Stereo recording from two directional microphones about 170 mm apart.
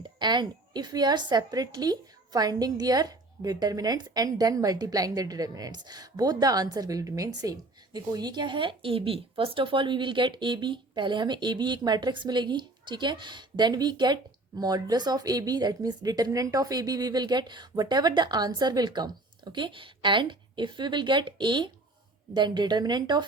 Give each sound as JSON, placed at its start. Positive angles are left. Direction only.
{"t": 0.0, "sound": "a woman's voice", "side_deg": -25}